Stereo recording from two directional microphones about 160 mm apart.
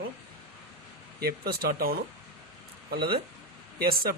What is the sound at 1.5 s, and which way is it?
Speech, 70° right (ahead or behind).